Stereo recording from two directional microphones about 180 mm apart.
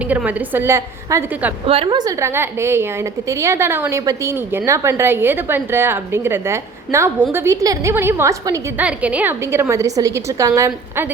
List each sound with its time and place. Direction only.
0.1 s a woman's voice: 10° right (ahead or behind)
1.6 s a woman's voice: 30° right (ahead or behind)
8.8 s a woman's voice: 5° right (ahead or behind)